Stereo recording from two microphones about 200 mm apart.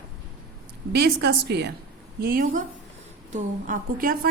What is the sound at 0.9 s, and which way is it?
Speech, 55° right (ahead or behind).